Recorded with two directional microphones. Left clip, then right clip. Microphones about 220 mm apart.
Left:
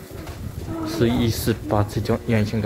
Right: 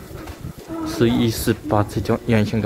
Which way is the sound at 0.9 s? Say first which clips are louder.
Right 3 dB; 10° right (ahead or behind).